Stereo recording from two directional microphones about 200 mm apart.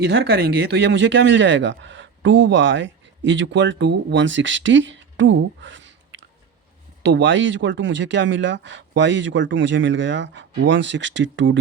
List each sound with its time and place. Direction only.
0.0 s speech: 60° right (ahead or behind)